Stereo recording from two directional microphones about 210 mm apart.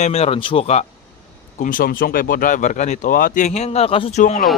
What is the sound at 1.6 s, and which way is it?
Speech, 40° left (ahead or behind).